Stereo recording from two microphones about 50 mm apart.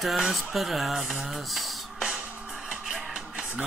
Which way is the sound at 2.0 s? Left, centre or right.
Centre.